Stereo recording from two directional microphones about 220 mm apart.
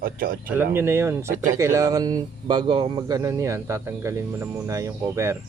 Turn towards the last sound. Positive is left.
turn(degrees=-15)  # may be behind; listen again after turning